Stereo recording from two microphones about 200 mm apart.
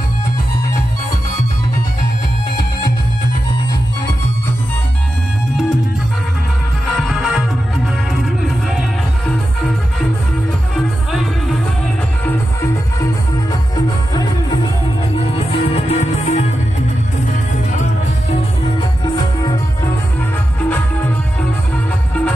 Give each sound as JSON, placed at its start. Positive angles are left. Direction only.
{"t": 7.0, "sound": "music", "side_deg": 0}
{"t": 13.0, "sound": "music", "side_deg": 20}
{"t": 18.8, "sound": "music", "side_deg": 20}